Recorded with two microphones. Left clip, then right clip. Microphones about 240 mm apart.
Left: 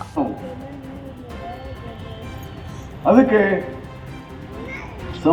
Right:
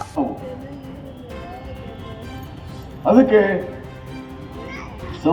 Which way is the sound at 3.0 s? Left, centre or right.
Right.